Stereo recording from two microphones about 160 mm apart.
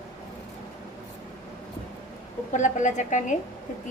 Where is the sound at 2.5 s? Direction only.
50° left (ahead or behind).